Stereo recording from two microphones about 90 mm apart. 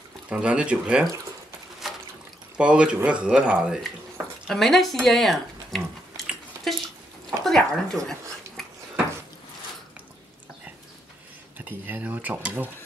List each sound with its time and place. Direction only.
0.3 s speech: 10° right (ahead or behind)
1.8 s water: centre (ahead or behind)
2.5 s speech: 10° right (ahead or behind)
4.5 s speech: centre (ahead or behind)
6.1 s chewing: centre (ahead or behind)
7.2 s a sound: 5° left (ahead or behind)
11.5 s speech: 20° right (ahead or behind)